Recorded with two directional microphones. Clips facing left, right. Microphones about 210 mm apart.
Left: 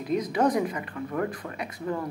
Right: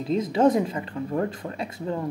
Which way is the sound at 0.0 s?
25° right (ahead or behind).